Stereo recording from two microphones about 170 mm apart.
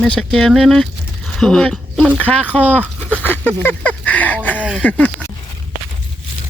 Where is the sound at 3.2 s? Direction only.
10° left (ahead or behind).